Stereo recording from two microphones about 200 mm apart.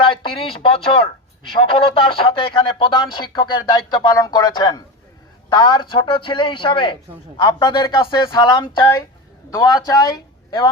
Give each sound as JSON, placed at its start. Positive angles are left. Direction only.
{"t": 0.0, "sound": "a man's voice", "side_deg": 25}